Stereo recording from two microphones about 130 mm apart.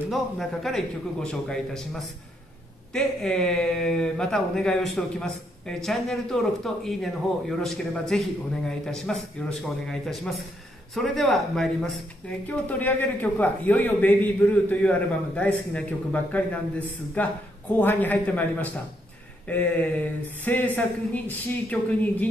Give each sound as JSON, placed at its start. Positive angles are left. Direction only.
{"t": 0.1, "sound": "a man's voice", "side_deg": 0}